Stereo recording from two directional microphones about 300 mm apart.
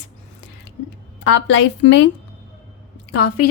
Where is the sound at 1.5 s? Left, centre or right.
Left.